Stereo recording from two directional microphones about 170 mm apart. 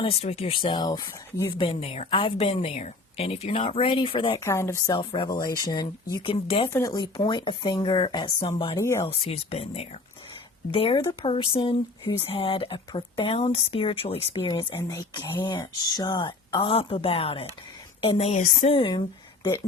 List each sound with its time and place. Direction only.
0.0 s speech: 35° left (ahead or behind)
4.4 s speech: 15° left (ahead or behind)
4.9 s a woman's voice: 30° left (ahead or behind)
6.7 s a woman's voice: 20° left (ahead or behind)
8.8 s speech: 15° left (ahead or behind)
9.0 s a woman's voice: 35° left (ahead or behind)